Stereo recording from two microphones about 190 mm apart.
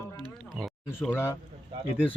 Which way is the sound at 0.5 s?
Centre (ahead or behind).